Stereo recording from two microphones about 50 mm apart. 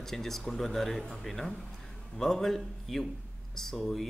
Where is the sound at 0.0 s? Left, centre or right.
Centre.